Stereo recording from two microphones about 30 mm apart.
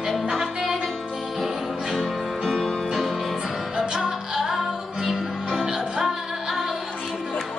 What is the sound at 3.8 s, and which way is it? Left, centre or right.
Music, right.